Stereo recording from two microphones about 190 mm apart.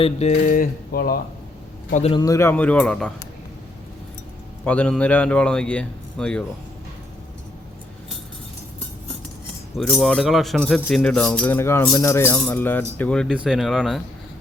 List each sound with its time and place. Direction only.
0.0 s a sound: 35° left (ahead or behind)
0.3 s speech: 45° left (ahead or behind)
1.9 s a sound: 35° left (ahead or behind)
2.1 s speech: 20° left (ahead or behind)
4.6 s a man's voice: 5° left (ahead or behind)
9.7 s a man's voice: 5° left (ahead or behind)